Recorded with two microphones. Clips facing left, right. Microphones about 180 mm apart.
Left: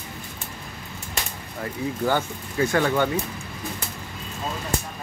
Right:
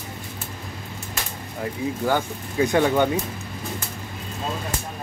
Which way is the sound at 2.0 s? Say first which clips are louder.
Even; 15° right (ahead or behind).